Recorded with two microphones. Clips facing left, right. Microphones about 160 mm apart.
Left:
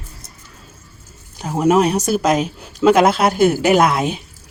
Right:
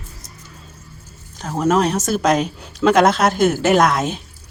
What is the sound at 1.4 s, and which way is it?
Speech, 10° left (ahead or behind).